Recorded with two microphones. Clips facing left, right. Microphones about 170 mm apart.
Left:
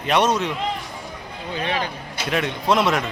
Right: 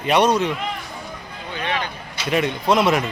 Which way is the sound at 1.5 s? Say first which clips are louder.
Left 1 dB; 35° left (ahead or behind).